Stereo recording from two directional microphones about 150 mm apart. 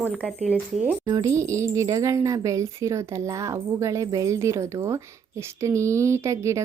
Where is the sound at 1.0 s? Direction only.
20° right (ahead or behind).